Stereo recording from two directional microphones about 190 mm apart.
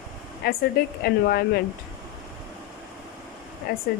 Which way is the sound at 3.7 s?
50° left (ahead or behind).